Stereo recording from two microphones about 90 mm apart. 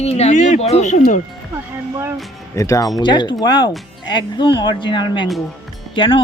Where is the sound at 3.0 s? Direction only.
55° left (ahead or behind).